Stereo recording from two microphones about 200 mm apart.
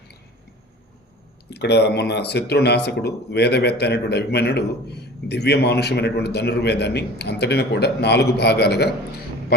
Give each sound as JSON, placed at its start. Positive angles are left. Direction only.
{"t": 1.5, "sound": "speech", "side_deg": 55}